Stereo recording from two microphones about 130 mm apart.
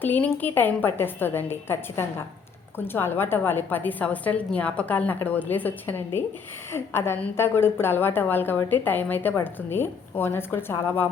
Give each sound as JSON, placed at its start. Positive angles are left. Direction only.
{"t": 0.0, "sound": "a woman's voice", "side_deg": 15}